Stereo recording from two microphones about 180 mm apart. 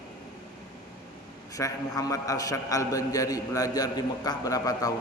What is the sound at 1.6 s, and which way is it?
A man's voice, 20° left (ahead or behind).